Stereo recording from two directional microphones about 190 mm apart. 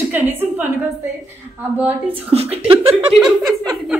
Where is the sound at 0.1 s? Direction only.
10° right (ahead or behind).